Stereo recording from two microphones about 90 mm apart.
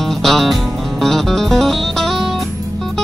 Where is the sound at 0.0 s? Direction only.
Centre (ahead or behind).